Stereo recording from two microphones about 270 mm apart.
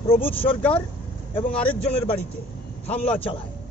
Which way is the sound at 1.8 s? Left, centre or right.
Left.